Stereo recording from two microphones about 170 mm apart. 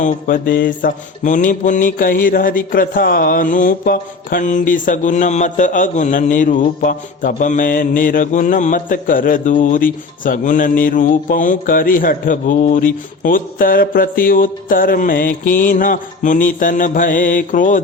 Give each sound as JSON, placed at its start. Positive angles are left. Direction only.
{"t": 0.0, "sound": "mantra", "side_deg": 55}